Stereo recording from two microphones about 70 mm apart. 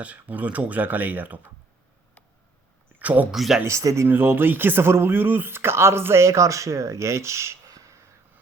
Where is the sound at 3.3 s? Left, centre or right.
Centre.